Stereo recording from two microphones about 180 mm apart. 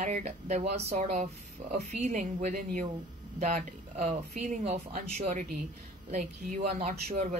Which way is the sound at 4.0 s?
40° right (ahead or behind).